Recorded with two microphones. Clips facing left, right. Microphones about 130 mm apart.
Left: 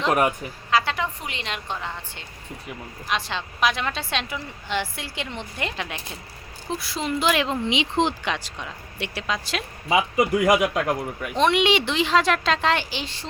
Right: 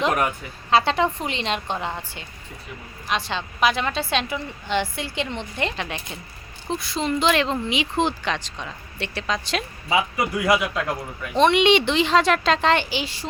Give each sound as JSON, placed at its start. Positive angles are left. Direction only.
{"t": 0.7, "sound": "a woman's voice", "side_deg": -25}
{"t": 3.1, "sound": "a woman's voice", "side_deg": 0}
{"t": 7.7, "sound": "speech", "side_deg": 20}
{"t": 9.9, "sound": "speech", "side_deg": 15}
{"t": 11.3, "sound": "a woman's voice", "side_deg": 0}